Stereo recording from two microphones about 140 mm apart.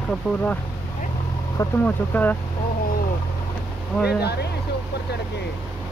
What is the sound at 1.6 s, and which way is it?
Speech, 25° left (ahead or behind).